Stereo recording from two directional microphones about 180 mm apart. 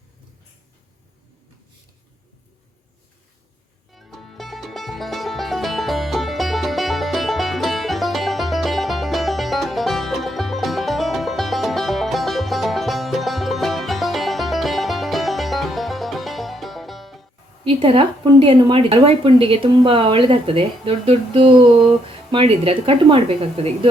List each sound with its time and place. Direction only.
3.9 s music: centre (ahead or behind)
17.7 s speech: 30° right (ahead or behind)